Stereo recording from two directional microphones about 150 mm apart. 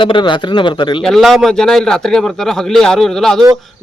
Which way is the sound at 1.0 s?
Centre (ahead or behind).